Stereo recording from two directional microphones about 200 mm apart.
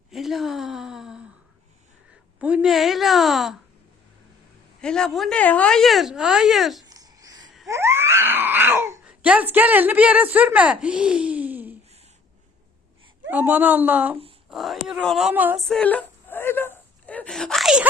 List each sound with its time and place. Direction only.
0.1 s a sound: centre (ahead or behind)
2.4 s a woman's voice: 5° right (ahead or behind)
4.8 s a woman's voice: 5° left (ahead or behind)
6.8 s a sound: 20° right (ahead or behind)
7.7 s speech: 10° right (ahead or behind)
13.2 s speech: 10° right (ahead or behind)